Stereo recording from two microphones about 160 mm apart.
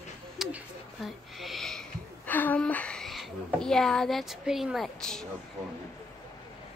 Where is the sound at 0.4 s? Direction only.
5° right (ahead or behind).